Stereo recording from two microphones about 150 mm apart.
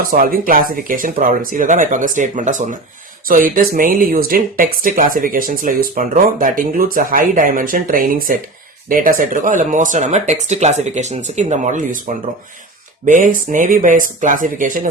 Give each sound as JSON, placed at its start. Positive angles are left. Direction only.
{"t": 0.1, "sound": "speech", "side_deg": -75}
{"t": 3.2, "sound": "speech", "side_deg": -70}